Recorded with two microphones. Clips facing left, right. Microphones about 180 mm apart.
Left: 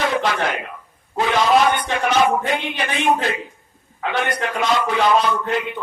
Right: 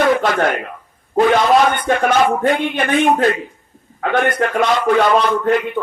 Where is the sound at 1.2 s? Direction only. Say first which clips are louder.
Right 4 dB; 50° right (ahead or behind).